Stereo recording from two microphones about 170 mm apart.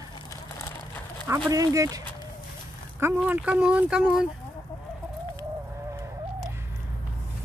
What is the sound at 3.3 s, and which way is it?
Speech, 5° right (ahead or behind).